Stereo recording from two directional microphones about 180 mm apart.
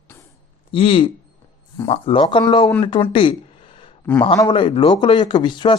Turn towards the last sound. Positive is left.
turn(degrees=25)  # may be behind; listen again after turning